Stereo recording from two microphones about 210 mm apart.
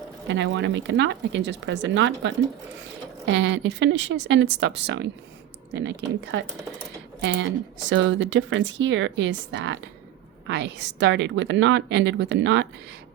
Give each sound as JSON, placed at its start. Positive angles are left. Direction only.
{"t": 0.3, "sound": "speech", "side_deg": -60}